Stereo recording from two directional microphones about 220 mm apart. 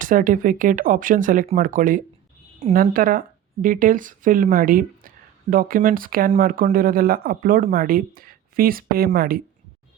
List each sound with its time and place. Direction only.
0.0 s speech: 40° right (ahead or behind)